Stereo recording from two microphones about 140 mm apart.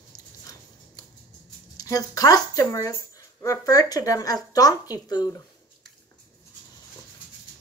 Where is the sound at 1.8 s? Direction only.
25° left (ahead or behind).